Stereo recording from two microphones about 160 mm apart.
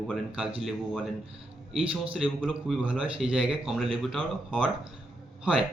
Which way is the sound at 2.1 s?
5° right (ahead or behind).